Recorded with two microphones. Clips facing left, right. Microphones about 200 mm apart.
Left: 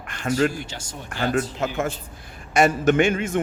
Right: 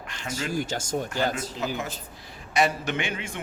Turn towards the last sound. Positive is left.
turn(degrees=45)  # may be behind; listen again after turning